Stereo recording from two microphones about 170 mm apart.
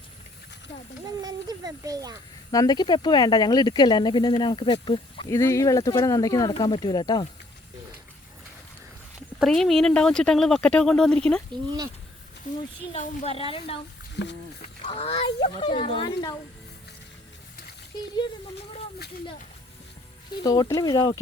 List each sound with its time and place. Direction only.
1.2 s speech: 20° right (ahead or behind)
2.5 s speech: 20° left (ahead or behind)
5.3 s speech: 15° left (ahead or behind)
9.4 s speech: centre (ahead or behind)
13.0 s a woman's voice: 35° left (ahead or behind)
14.2 s speech: 90° left
14.8 s a woman's voice: 35° left (ahead or behind)
20.4 s speech: 20° left (ahead or behind)